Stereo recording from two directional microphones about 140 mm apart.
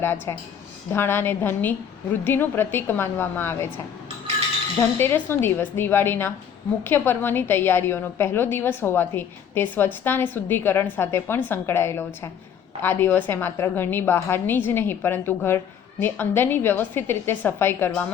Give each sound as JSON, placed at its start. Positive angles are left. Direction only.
{"t": 0.0, "sound": "a woman's voice", "side_deg": 20}
{"t": 4.8, "sound": "a woman's voice", "side_deg": 15}